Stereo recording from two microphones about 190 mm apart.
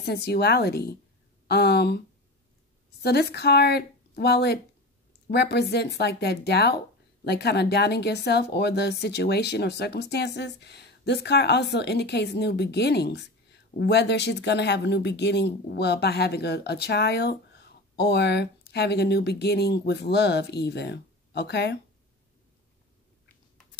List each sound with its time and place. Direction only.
0.0 s speech: 60° left (ahead or behind)
3.0 s speech: 60° left (ahead or behind)